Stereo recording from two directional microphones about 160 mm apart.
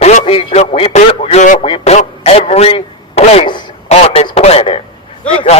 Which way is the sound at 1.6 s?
40° left (ahead or behind).